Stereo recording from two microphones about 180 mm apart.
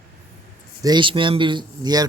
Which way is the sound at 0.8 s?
25° right (ahead or behind).